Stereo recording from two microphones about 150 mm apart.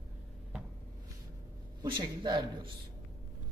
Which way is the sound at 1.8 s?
30° right (ahead or behind).